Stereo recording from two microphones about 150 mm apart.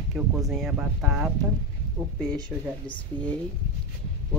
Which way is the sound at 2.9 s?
35° left (ahead or behind).